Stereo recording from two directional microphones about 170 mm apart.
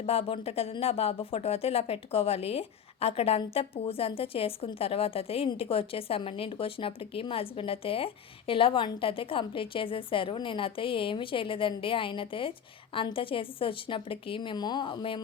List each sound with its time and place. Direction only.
0.0 s speech: 35° left (ahead or behind)